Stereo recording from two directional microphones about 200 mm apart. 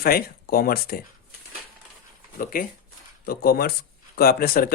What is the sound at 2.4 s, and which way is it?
Speech, 45° left (ahead or behind).